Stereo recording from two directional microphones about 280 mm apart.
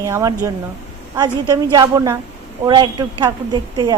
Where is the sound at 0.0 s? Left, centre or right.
Centre.